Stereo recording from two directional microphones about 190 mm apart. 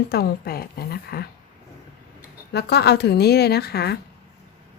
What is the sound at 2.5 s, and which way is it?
Speech, 60° left (ahead or behind).